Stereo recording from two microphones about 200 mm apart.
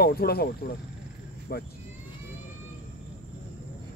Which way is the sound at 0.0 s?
50° left (ahead or behind).